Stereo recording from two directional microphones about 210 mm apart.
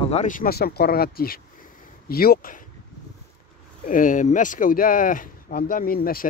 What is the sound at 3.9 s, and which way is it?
Speech, 40° left (ahead or behind).